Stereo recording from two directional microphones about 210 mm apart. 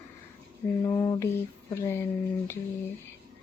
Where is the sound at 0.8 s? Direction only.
15° left (ahead or behind).